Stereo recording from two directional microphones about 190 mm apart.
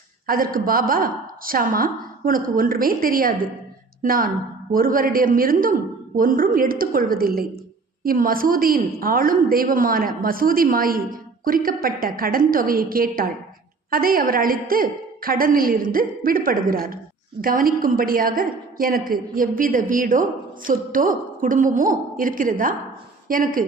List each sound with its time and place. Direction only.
0.3 s a woman's voice: 50° right (ahead or behind)